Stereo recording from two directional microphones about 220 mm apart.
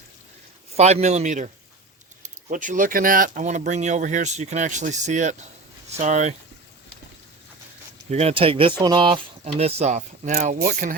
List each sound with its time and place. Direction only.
0.8 s speech: 30° right (ahead or behind)
8.1 s speech: 25° right (ahead or behind)